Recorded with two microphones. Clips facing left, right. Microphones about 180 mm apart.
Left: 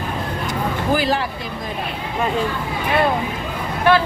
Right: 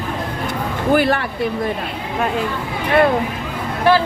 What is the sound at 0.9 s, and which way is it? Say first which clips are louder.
Speech: right 5 dB; 60° right (ahead or behind).